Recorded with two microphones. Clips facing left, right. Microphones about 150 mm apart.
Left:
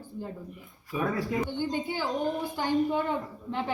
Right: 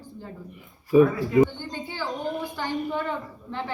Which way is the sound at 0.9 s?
65° right (ahead or behind).